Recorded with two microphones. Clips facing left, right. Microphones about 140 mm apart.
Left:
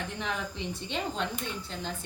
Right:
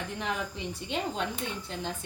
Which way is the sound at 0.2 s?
5° right (ahead or behind).